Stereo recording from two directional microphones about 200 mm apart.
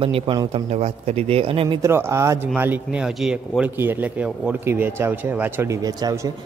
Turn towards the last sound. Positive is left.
turn(degrees=-20)  # may be behind; listen again after turning